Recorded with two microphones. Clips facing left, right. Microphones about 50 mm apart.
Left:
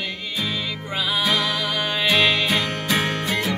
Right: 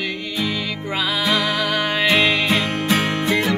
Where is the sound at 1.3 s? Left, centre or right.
Right.